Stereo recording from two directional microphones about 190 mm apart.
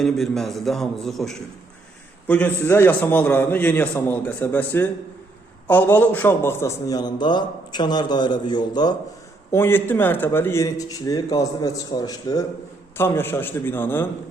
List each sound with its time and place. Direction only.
0.0 s a man's voice: centre (ahead or behind)